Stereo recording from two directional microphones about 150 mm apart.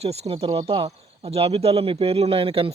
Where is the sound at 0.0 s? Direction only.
40° right (ahead or behind).